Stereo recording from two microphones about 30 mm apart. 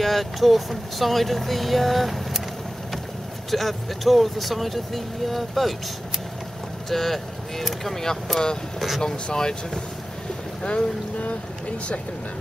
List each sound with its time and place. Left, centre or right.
0.0 s speech: centre
3.4 s speech: centre
6.9 s speech: centre
8.7 s speech: centre
9.3 s speech: left
10.6 s speech: left